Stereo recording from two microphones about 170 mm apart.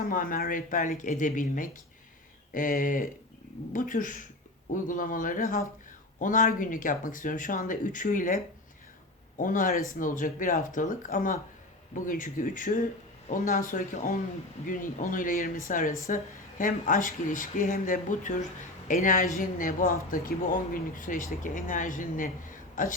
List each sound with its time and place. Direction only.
0.1 s speech: 55° left (ahead or behind)
9.4 s speech: 50° left (ahead or behind)